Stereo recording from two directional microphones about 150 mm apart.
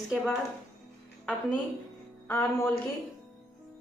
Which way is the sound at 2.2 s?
15° left (ahead or behind).